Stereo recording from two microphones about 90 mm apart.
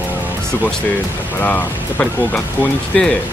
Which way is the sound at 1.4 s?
20° left (ahead or behind).